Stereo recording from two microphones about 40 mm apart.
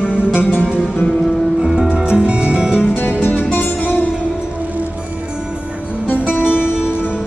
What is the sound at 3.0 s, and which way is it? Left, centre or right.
Music, left.